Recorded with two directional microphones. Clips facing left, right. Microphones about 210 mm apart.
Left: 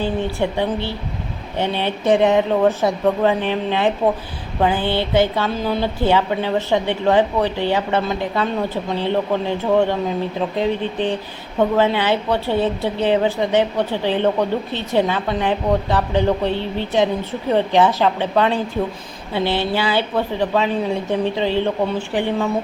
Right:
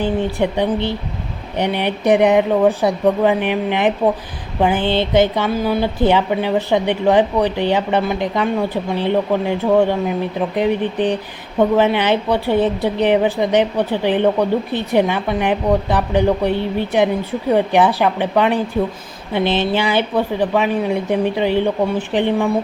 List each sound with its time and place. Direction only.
0.0 s speech: 15° right (ahead or behind)